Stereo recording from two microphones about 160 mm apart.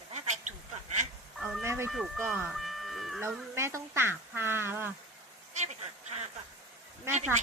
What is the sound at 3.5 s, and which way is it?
Speech, 15° right (ahead or behind).